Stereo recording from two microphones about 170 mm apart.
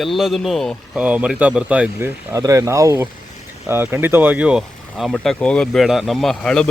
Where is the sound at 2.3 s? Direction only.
20° right (ahead or behind).